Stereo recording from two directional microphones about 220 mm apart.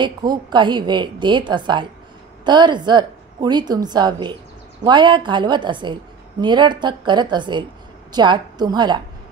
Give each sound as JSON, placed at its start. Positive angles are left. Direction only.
{"t": 0.0, "sound": "a woman's voice", "side_deg": -20}